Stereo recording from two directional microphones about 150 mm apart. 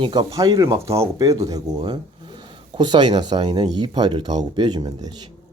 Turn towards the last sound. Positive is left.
turn(degrees=-25)  # may be behind; listen again after turning